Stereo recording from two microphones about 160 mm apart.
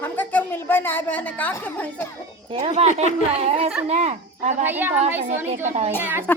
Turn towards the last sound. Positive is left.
turn(degrees=-10)  # may be behind; listen again after turning